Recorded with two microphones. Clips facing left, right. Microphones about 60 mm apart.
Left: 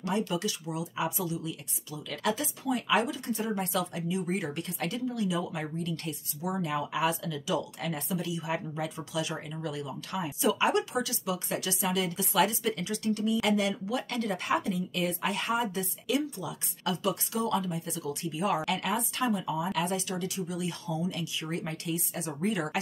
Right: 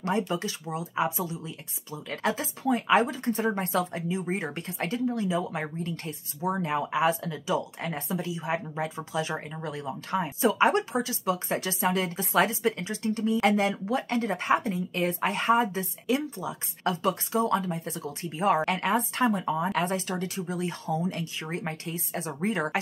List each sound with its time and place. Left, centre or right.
0.3 s speech: right